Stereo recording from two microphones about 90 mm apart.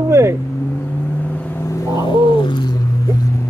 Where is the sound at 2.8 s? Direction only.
40° left (ahead or behind).